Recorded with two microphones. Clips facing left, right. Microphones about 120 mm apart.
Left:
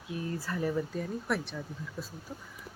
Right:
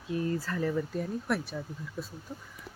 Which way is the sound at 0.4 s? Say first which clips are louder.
Right 1 dB; 10° left (ahead or behind).